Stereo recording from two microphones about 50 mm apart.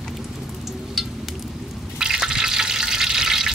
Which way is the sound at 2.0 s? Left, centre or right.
Centre.